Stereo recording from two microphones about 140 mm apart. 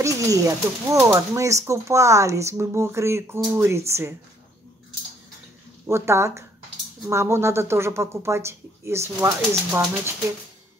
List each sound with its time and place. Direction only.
0.0 s speech: 25° right (ahead or behind)
5.9 s speech: 20° right (ahead or behind)